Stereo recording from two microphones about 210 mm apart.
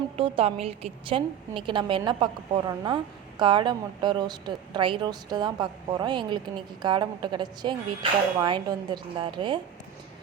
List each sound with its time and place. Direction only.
0.2 s a woman's voice: 30° right (ahead or behind)